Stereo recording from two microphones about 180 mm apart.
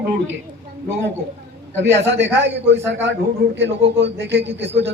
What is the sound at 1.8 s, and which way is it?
Speech, 85° right.